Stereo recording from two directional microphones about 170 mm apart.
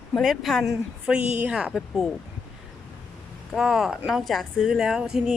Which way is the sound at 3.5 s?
Centre (ahead or behind).